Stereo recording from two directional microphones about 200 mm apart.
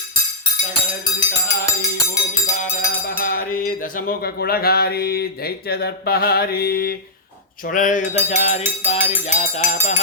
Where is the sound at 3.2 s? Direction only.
45° left (ahead or behind).